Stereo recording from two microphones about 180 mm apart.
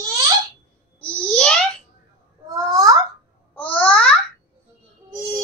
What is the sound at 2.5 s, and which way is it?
Babbling, 20° right (ahead or behind).